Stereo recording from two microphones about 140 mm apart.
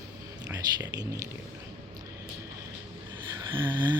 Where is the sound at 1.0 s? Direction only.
25° right (ahead or behind).